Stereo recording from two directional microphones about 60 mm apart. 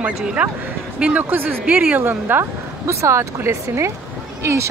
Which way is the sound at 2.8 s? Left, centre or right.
Right.